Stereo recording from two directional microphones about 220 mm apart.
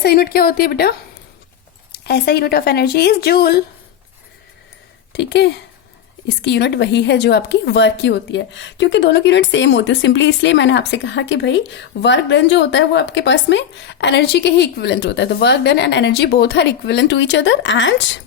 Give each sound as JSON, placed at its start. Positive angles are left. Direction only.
{"t": 0.0, "sound": "a woman's voice", "side_deg": 45}
{"t": 5.1, "sound": "a woman's voice", "side_deg": 50}